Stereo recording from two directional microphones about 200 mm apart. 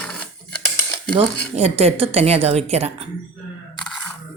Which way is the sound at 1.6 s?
30° right (ahead or behind).